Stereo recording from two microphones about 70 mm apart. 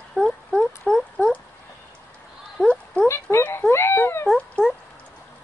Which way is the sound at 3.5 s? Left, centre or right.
Left.